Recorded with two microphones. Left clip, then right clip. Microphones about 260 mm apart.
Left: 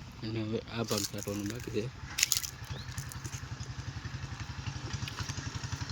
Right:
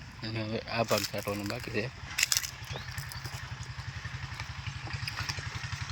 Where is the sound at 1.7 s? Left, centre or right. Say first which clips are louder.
Right 2 dB; centre.